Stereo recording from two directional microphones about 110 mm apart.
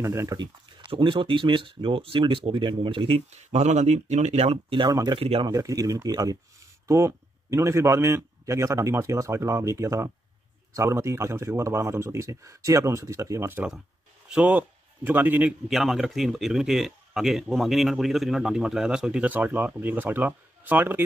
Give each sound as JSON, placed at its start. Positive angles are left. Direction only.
{"t": 0.0, "sound": "a man's voice", "side_deg": -25}
{"t": 0.4, "sound": "speech", "side_deg": -45}
{"t": 3.3, "sound": "speech", "side_deg": -90}
{"t": 4.8, "sound": "a man's voice", "side_deg": -40}
{"t": 15.7, "sound": "speech", "side_deg": 0}